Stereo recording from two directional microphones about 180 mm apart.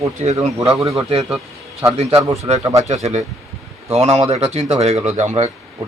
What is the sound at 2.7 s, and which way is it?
Speech, 40° right (ahead or behind).